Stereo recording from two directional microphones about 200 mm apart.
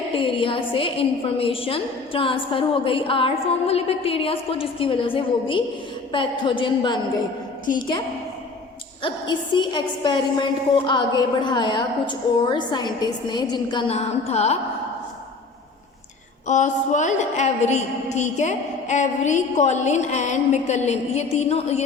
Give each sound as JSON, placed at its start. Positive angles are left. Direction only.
{"t": 0.2, "sound": "a woman's voice", "side_deg": 25}
{"t": 9.0, "sound": "a woman's voice", "side_deg": 25}
{"t": 16.5, "sound": "a woman's voice", "side_deg": 35}